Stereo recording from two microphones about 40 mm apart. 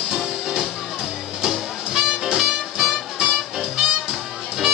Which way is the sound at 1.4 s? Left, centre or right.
Centre.